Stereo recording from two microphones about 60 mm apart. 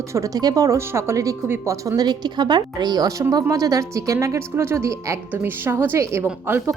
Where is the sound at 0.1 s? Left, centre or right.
Right.